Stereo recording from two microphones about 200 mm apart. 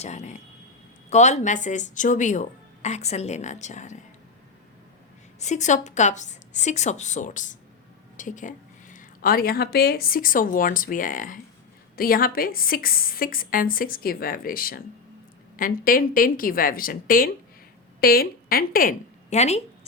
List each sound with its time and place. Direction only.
0.0 s a woman's voice: 35° left (ahead or behind)
5.4 s a woman's voice: 35° left (ahead or behind)